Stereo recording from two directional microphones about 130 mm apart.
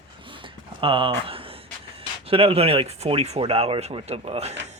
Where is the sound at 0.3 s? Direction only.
40° right (ahead or behind).